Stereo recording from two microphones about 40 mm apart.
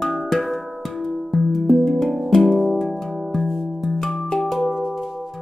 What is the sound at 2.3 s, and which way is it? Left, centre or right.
Music, centre.